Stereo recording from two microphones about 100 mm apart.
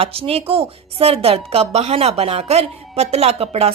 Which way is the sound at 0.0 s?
80° right.